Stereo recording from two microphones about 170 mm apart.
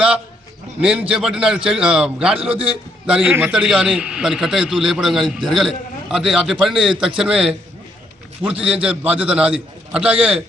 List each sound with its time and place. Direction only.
0.8 s a man's voice: 5° right (ahead or behind)
2.4 s a man's voice: 35° right (ahead or behind)
3.1 s a man's voice: 5° right (ahead or behind)